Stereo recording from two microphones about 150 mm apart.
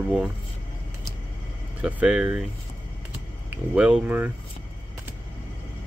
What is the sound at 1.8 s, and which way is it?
Speech, 10° right (ahead or behind).